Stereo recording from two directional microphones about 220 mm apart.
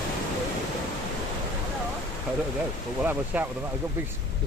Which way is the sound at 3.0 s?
5° right (ahead or behind).